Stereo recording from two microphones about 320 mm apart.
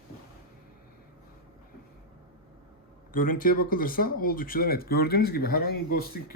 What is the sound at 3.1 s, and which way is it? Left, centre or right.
Speech, left.